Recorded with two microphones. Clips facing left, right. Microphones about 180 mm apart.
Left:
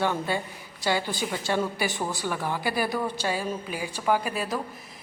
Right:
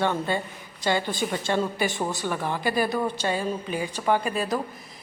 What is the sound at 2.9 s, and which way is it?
Speech, 15° right (ahead or behind).